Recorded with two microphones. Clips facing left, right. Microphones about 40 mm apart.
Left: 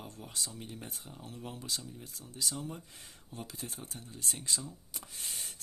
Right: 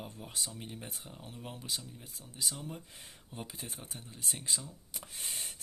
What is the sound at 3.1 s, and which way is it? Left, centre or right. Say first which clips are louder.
Speech: even; right.